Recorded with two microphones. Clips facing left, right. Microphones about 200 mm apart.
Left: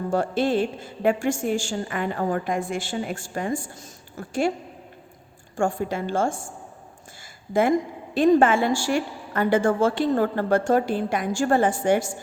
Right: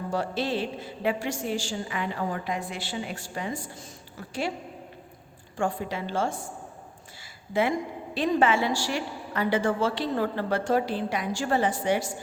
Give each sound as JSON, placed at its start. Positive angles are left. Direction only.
{"t": 0.1, "sound": "a woman's voice", "side_deg": 50}
{"t": 5.5, "sound": "a woman's voice", "side_deg": 50}
{"t": 8.1, "sound": "a woman's voice", "side_deg": 50}